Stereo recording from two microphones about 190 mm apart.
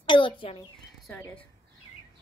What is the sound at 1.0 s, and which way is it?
Speech, 5° left (ahead or behind).